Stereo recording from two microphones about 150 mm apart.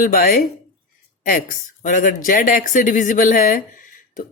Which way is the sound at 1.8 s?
60° left (ahead or behind).